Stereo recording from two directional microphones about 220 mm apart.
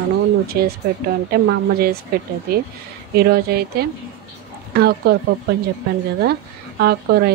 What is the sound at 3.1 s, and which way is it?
Speech, 45° right (ahead or behind).